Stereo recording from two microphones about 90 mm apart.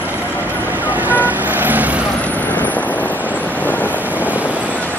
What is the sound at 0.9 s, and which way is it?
Vehicle, 20° right (ahead or behind).